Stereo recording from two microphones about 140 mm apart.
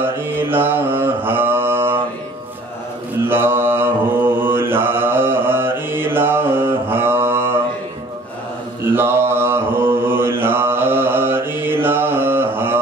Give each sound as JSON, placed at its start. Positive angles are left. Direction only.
{"t": 0.0, "sound": "mantra", "side_deg": -15}
{"t": 3.2, "sound": "mantra", "side_deg": -15}
{"t": 8.8, "sound": "mantra", "side_deg": -15}